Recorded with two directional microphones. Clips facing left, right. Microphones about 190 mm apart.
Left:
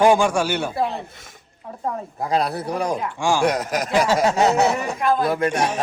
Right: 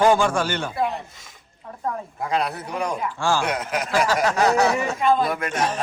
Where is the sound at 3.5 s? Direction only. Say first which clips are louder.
Left 3 dB; 40° left (ahead or behind).